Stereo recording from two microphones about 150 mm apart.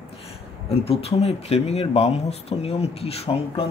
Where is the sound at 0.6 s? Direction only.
40° left (ahead or behind).